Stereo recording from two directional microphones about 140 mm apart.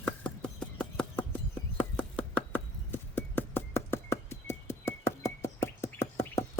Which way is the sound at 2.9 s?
15° left (ahead or behind).